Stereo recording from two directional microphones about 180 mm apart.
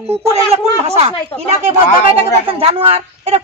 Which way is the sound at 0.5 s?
35° right (ahead or behind).